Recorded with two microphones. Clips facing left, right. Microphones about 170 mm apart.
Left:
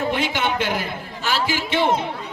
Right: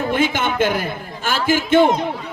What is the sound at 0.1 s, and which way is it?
A man's voice, 50° right (ahead or behind).